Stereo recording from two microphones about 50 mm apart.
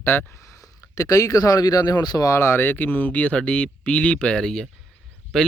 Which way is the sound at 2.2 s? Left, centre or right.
Left.